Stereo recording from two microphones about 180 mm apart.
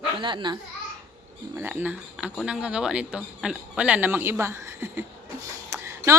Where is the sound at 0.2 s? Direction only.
25° right (ahead or behind).